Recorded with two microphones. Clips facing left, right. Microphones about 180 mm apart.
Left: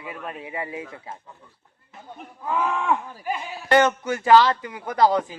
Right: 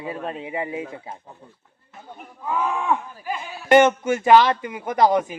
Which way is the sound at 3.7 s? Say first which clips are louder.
Right 4 dB; 20° right (ahead or behind).